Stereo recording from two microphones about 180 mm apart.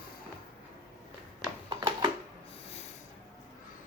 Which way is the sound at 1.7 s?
25° right (ahead or behind).